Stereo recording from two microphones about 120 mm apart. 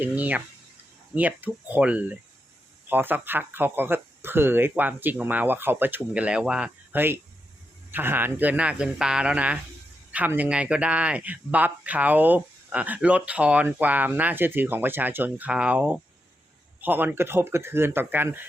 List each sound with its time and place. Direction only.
0.0 s speech: 15° right (ahead or behind)